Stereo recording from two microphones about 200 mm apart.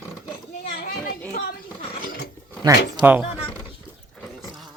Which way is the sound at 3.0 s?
10° right (ahead or behind).